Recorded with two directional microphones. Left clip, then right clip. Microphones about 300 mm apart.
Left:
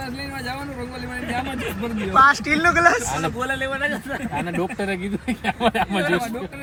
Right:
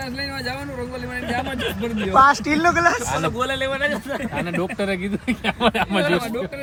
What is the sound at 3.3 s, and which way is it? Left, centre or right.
Speech, right.